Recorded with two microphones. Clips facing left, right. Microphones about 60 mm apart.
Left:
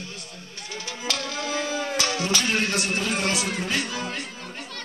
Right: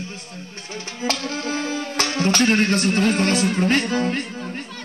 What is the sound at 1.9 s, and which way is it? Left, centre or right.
Speech, right.